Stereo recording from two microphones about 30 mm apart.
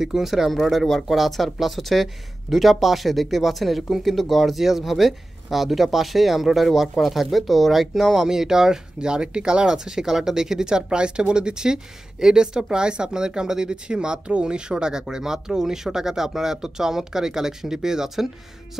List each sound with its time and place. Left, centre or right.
0.0 s speech: centre
0.3 s speech: centre
8.1 s speech: centre
9.0 s speech: right
9.8 s speech: centre